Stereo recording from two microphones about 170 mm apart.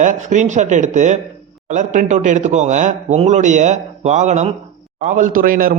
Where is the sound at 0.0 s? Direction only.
45° right (ahead or behind).